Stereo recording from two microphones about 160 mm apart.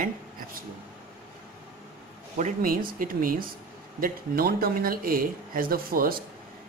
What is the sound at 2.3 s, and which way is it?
Speech, 55° right (ahead or behind).